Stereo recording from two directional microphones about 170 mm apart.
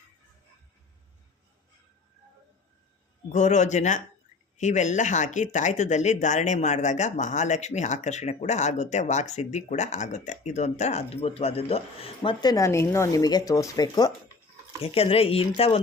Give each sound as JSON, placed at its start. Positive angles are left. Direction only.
{"t": 3.3, "sound": "speech", "side_deg": 45}
{"t": 14.8, "sound": "speech", "side_deg": 35}